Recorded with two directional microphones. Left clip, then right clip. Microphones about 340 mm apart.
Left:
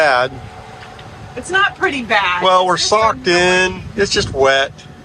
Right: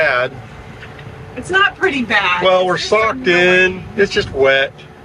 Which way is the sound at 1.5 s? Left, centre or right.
Left.